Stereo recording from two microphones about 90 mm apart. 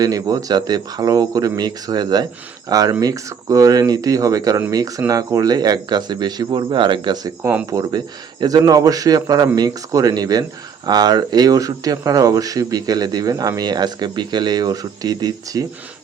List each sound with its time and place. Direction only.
0.0 s speech: 40° right (ahead or behind); by 7.2 s 65° right (ahead or behind)
7.7 s speech: 45° right (ahead or behind)